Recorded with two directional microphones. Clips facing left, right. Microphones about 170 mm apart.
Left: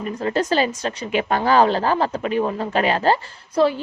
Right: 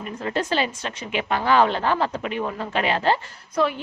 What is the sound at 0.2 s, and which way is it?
A woman's voice, 40° left (ahead or behind).